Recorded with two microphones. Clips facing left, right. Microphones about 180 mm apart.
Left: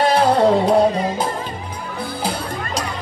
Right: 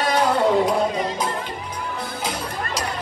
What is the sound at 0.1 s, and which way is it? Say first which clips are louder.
Music: even; 35° left (ahead or behind).